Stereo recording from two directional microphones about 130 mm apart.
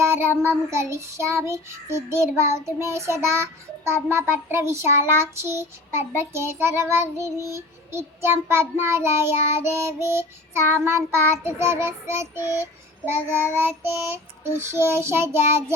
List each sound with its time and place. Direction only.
0.0 s child singing: 20° right (ahead or behind)